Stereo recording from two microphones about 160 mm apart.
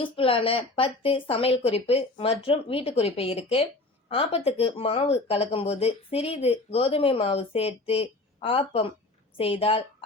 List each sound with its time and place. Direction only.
0.0 s speech: 35° left (ahead or behind)